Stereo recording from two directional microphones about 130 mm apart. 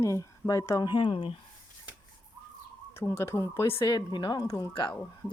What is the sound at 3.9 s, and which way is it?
A woman's voice, 35° left (ahead or behind).